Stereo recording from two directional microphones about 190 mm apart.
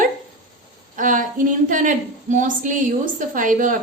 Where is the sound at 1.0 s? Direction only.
45° right (ahead or behind).